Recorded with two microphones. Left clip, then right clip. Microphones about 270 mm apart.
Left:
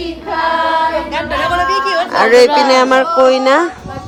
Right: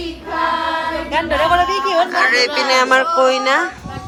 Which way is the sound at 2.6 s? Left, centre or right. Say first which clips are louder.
Left 3 dB; centre.